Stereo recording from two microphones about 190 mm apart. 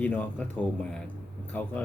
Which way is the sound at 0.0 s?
10° left (ahead or behind).